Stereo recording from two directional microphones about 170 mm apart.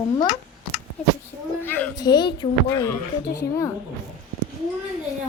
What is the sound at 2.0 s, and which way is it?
Speech, 25° left (ahead or behind).